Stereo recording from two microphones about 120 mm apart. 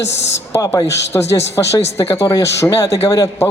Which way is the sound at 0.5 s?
30° left (ahead or behind).